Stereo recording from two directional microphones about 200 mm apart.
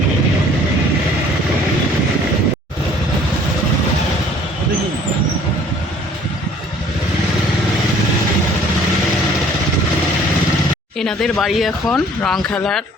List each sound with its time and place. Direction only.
11.0 s speech: centre (ahead or behind)